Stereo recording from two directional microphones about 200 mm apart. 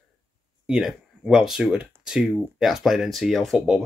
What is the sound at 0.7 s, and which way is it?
Speech, 5° right (ahead or behind).